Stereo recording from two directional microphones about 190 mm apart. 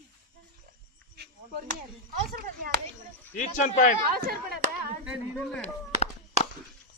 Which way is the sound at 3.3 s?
40° left (ahead or behind).